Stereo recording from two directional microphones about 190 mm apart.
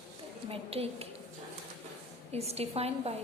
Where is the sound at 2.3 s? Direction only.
35° right (ahead or behind).